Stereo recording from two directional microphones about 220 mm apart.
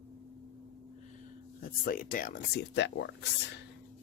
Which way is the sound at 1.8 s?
40° left (ahead or behind).